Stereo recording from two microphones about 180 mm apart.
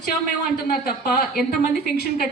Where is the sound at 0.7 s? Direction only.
60° left (ahead or behind).